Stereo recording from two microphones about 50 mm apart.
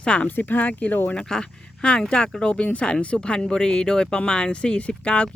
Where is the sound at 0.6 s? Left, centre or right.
Left.